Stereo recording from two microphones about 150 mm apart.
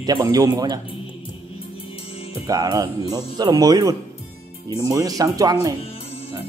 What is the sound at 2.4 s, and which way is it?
Speech, 25° right (ahead or behind).